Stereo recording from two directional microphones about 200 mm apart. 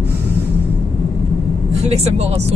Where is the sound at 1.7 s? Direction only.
30° right (ahead or behind).